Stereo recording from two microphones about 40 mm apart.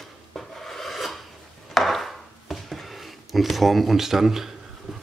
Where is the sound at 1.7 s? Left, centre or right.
Centre.